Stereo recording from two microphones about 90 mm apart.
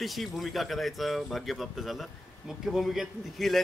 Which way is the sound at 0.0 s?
Centre (ahead or behind).